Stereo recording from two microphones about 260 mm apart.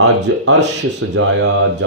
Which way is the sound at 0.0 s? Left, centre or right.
Right.